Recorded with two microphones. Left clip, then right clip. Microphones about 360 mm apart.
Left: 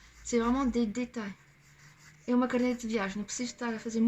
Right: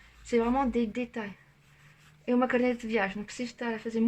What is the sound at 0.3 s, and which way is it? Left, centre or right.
Speech, centre.